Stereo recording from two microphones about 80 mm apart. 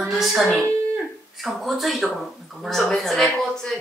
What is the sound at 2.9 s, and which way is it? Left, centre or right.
Speech, centre.